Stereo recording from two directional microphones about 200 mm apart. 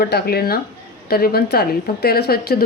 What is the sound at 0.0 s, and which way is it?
A woman's voice, 55° left (ahead or behind).